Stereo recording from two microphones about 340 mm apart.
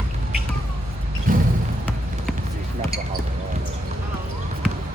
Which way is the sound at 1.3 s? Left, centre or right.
Right.